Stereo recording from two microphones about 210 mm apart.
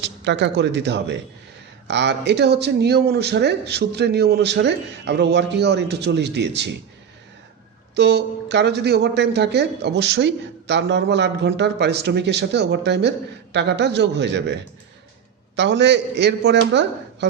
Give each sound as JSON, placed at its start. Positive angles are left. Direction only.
{"t": 0.0, "sound": "speech", "side_deg": -55}
{"t": 7.9, "sound": "speech", "side_deg": -55}